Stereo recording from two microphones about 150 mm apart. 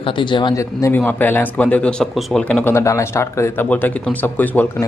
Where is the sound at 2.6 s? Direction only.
20° left (ahead or behind).